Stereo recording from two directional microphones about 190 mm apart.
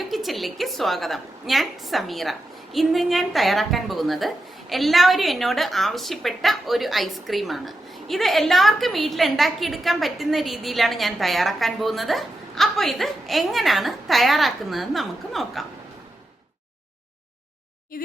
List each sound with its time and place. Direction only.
0.1 s a woman's voice: centre (ahead or behind)
17.9 s speech: 50° left (ahead or behind)